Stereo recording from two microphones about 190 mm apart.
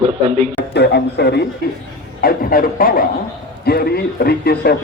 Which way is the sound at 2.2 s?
50° left (ahead or behind).